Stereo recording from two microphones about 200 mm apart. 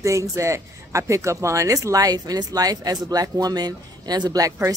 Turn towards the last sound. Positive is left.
turn(degrees=-15)  # may be behind; listen again after turning